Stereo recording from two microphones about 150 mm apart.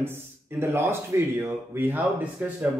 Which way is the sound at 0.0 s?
15° right (ahead or behind).